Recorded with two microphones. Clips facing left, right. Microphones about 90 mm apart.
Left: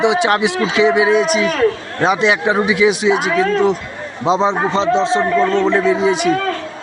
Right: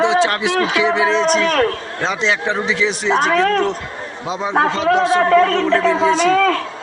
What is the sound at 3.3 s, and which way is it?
Speech, 60° right (ahead or behind).